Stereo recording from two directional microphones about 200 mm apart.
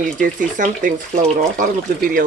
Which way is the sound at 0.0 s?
40° right (ahead or behind).